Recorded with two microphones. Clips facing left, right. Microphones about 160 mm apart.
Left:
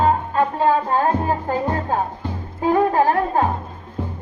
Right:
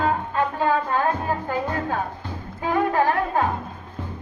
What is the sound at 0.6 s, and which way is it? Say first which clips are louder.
Music: left 3 dB; 35° left (ahead or behind).